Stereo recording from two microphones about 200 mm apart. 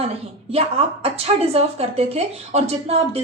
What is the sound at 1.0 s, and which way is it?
Speech, 30° right (ahead or behind).